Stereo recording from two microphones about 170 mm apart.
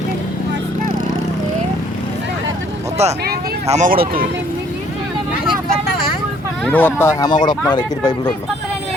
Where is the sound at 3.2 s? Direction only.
65° right (ahead or behind).